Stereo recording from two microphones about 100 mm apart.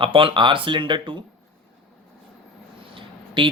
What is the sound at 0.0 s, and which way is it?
Speech, 60° right (ahead or behind).